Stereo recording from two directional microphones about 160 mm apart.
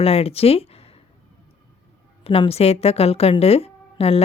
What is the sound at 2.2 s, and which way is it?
A woman's voice, 35° left (ahead or behind).